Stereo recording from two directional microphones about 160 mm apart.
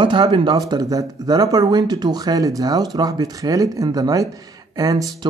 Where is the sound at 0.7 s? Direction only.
20° right (ahead or behind).